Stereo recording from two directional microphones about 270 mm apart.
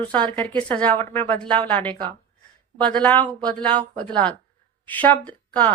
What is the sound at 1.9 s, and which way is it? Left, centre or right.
Speech, centre.